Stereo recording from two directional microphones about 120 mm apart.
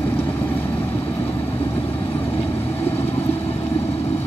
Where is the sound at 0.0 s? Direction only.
15° left (ahead or behind).